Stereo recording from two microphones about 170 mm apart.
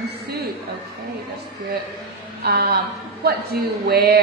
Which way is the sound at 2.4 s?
65° right (ahead or behind).